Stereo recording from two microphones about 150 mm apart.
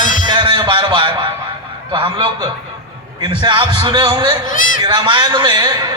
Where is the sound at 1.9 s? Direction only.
35° right (ahead or behind).